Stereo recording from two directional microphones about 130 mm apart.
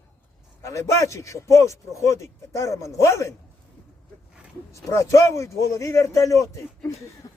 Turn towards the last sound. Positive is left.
turn(degrees=25)  # may be behind; listen again after turning